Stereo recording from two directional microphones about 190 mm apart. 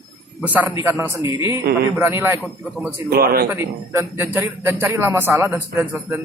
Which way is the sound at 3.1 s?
55° right (ahead or behind).